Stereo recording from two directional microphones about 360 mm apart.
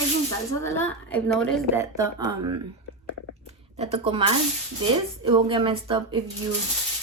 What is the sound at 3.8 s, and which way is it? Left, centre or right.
Speech, centre.